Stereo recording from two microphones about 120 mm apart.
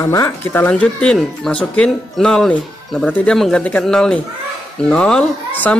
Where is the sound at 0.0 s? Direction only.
25° left (ahead or behind).